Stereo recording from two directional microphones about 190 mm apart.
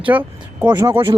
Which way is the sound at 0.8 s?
20° right (ahead or behind).